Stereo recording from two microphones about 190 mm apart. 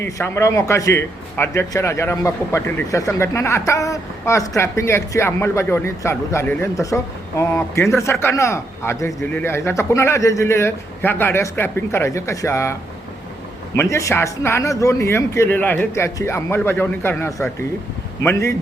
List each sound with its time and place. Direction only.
0.0 s a man's voice: 15° left (ahead or behind)
13.7 s a man's voice: 15° left (ahead or behind)